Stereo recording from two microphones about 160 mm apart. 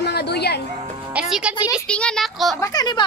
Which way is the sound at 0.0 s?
90° left.